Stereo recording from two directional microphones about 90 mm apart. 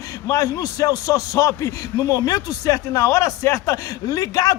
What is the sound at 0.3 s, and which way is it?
A man's voice, 40° left (ahead or behind).